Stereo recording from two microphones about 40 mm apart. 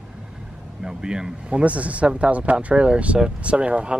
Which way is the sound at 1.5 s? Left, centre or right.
Right.